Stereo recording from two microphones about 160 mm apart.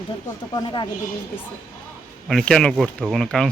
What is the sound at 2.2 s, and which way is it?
Speech, 5° left (ahead or behind).